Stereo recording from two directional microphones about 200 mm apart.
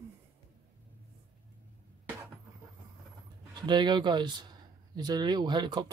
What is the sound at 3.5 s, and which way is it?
Speech, 20° right (ahead or behind).